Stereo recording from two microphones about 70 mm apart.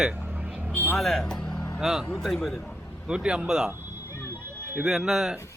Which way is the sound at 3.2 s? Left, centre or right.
Centre.